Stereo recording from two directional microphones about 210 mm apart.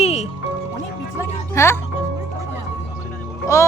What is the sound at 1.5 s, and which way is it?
Speech, 10° left (ahead or behind).